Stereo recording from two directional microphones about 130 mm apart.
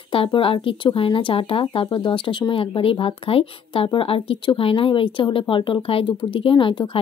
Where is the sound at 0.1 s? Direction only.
45° left (ahead or behind).